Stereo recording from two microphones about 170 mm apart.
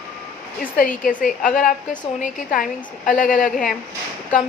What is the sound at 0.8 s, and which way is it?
A woman's voice, 50° left (ahead or behind).